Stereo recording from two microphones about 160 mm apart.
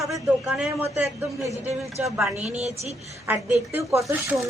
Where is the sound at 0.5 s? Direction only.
5° right (ahead or behind).